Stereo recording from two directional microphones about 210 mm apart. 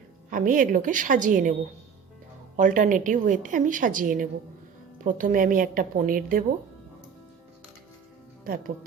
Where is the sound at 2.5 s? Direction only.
40° right (ahead or behind).